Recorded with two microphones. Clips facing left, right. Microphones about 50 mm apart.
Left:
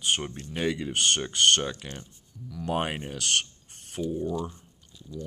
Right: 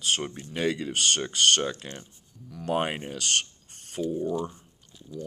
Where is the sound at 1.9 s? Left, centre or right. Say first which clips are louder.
Even; right.